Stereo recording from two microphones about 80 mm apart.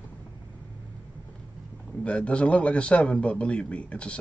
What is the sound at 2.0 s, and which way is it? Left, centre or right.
A man's voice, centre.